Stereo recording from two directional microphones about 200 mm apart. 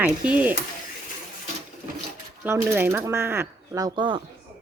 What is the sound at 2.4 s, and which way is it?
Speech, 10° right (ahead or behind).